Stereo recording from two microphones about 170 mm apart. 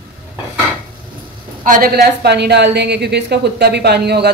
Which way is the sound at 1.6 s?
55° right (ahead or behind).